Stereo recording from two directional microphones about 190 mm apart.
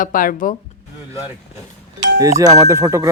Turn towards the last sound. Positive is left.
turn(degrees=-15)  # may be behind; listen again after turning